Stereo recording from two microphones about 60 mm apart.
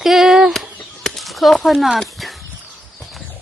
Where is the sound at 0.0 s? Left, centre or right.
Centre.